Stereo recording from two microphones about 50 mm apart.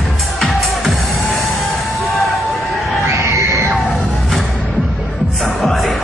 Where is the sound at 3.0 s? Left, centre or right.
Right.